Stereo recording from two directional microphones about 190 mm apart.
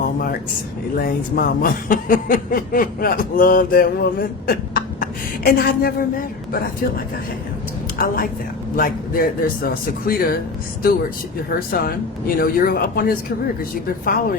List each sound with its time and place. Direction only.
0.9 s speech: 50° left (ahead or behind)
11.7 s speech: 50° left (ahead or behind)